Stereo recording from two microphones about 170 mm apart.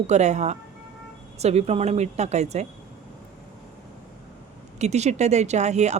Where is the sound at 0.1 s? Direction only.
40° right (ahead or behind).